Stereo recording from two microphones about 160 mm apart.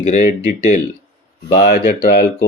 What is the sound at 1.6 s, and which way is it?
Speech, 75° left (ahead or behind).